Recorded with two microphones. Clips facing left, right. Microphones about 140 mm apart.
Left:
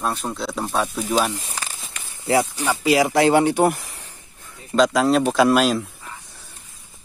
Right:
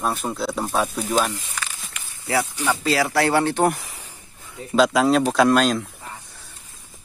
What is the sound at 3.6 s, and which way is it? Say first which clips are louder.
Speech: left 2 dB; centre (ahead or behind).